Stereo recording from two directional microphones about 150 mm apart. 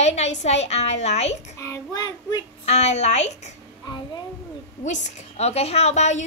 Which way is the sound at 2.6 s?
50° left (ahead or behind).